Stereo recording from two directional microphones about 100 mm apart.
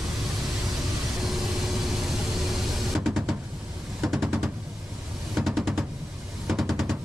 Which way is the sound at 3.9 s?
Centre (ahead or behind).